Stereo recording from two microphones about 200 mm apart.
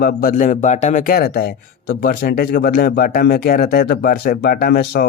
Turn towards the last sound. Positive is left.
turn(degrees=55)  # may be behind; listen again after turning